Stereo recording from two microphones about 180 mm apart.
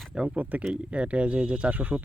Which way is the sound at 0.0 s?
5° right (ahead or behind).